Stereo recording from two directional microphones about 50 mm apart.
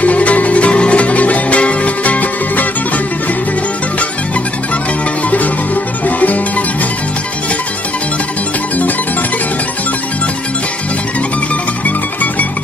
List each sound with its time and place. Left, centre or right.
0.0 s music: left
6.0 s music: left
11.8 s music: left